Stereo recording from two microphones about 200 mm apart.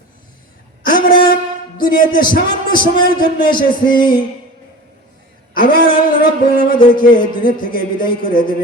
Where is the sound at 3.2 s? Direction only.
45° left (ahead or behind).